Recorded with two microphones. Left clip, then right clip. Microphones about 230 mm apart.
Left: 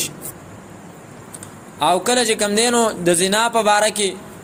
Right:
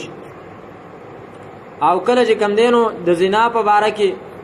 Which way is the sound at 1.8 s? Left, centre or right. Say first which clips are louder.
Right 3 dB; left.